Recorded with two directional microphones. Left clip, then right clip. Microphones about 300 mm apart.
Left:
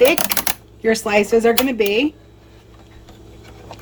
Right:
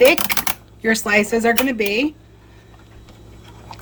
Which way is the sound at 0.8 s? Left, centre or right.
Centre.